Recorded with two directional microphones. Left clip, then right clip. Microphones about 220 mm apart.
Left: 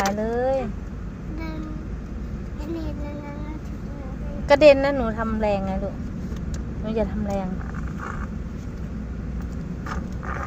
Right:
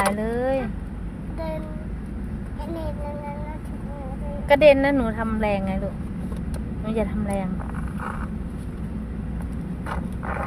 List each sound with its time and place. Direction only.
0.2 s vehicle: centre (ahead or behind)
4.4 s a woman's voice: 10° left (ahead or behind)
6.8 s a woman's voice: centre (ahead or behind)
9.9 s a sound: 5° left (ahead or behind)